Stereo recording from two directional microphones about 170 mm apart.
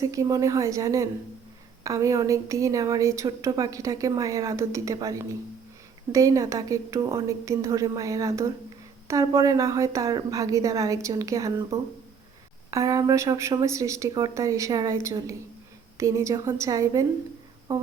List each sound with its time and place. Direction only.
0.0 s a woman's voice: 20° right (ahead or behind)